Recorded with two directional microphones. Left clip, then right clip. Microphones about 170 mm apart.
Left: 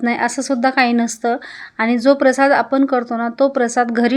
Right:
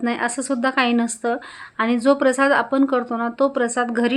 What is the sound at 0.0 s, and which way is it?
A woman's voice, 25° left (ahead or behind).